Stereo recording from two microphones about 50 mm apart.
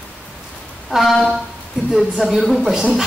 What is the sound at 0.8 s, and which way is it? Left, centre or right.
A woman's voice, centre.